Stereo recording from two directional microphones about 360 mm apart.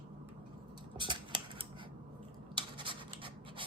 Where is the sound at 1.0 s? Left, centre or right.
Centre.